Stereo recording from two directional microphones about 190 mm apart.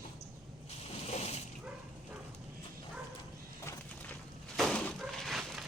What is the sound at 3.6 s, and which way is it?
Music, 15° left (ahead or behind).